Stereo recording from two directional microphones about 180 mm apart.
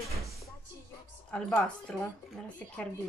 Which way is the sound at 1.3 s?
5° left (ahead or behind).